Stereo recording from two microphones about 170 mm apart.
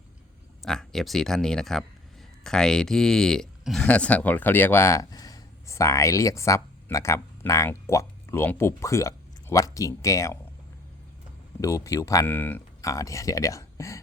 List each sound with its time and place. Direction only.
0.6 s speech: centre (ahead or behind); by 10.3 s 20° left (ahead or behind)
11.6 s speech: 20° left (ahead or behind)